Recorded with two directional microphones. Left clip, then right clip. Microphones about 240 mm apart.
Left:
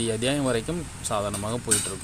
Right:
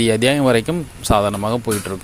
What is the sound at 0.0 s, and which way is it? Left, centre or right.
Speech, right.